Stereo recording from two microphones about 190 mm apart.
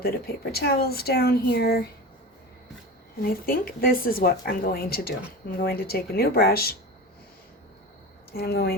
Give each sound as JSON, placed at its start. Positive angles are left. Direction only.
{"t": 0.0, "sound": "speech", "side_deg": 55}
{"t": 3.2, "sound": "speech", "side_deg": 50}
{"t": 8.3, "sound": "speech", "side_deg": 55}